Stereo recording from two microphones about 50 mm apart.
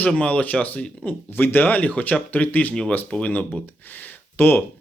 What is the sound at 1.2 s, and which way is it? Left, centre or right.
Speech, left.